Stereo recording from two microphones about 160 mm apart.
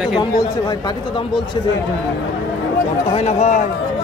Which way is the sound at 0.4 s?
25° left (ahead or behind).